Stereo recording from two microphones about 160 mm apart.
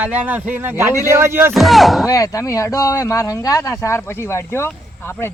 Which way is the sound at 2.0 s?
20° left (ahead or behind).